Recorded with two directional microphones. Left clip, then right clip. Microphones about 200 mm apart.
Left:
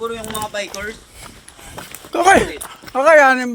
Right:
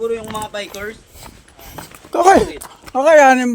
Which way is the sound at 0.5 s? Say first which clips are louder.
Left 4 dB; 25° right (ahead or behind).